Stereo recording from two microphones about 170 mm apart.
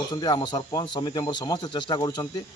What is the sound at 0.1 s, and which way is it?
A man's voice, 25° left (ahead or behind).